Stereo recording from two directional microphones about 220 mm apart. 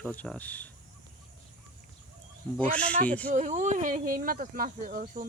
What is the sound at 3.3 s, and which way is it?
Speech, 35° right (ahead or behind).